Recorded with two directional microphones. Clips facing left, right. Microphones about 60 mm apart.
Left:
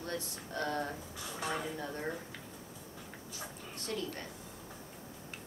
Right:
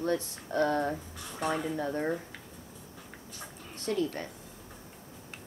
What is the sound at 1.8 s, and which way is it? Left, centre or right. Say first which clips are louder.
Speech: right 8 dB; right.